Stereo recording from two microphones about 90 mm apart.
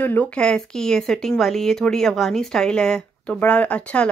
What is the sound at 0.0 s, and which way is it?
Speech, 20° left (ahead or behind).